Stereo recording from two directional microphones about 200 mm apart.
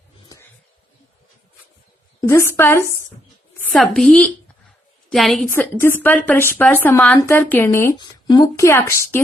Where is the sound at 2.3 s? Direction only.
15° left (ahead or behind).